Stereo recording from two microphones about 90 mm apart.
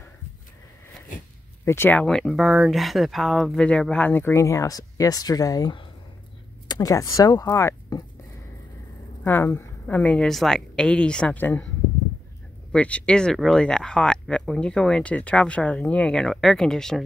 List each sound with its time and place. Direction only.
1.6 s speech: 30° left (ahead or behind)
2.0 s speech: 5° left (ahead or behind)
4.1 s speech: 30° left (ahead or behind)
9.2 s a woman's voice: 25° left (ahead or behind)
10.2 s speech: 5° left (ahead or behind); by 11.6 s 20° left (ahead or behind)
12.7 s speech: 15° left (ahead or behind)